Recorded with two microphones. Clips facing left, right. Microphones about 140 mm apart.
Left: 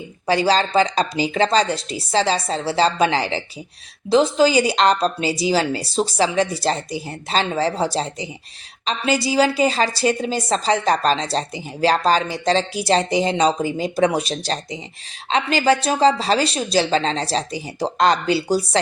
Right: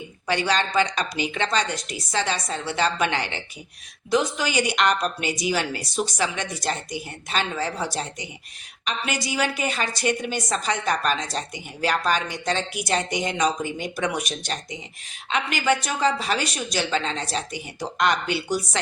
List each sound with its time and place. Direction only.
0.3 s a woman's voice: 30° left (ahead or behind)